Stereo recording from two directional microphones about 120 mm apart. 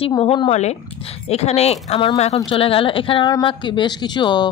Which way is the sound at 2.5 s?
50° left (ahead or behind).